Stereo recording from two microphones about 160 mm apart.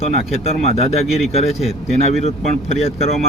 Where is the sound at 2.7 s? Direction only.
40° left (ahead or behind).